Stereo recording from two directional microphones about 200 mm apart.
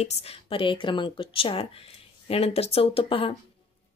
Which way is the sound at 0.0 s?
30° left (ahead or behind).